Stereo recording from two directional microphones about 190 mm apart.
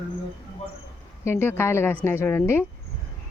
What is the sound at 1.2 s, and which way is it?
Speech, 10° left (ahead or behind).